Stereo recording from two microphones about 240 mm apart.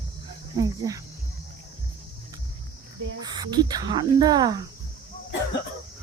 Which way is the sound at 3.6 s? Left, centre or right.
Centre.